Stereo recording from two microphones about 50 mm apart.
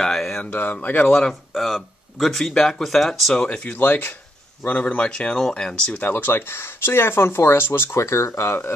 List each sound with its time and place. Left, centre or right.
0.0 s a sound: centre
0.4 s speech: left
1.0 s speech: centre
1.5 s speech: centre
3.3 s speech: left
3.6 s speech: left
5.0 s speech: left
5.9 s speech: left
8.0 s speech: left